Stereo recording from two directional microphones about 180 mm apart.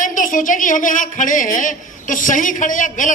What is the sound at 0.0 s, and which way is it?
A woman's voice, 45° left (ahead or behind).